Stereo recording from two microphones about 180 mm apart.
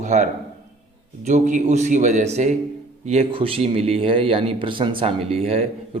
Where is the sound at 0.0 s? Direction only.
40° right (ahead or behind).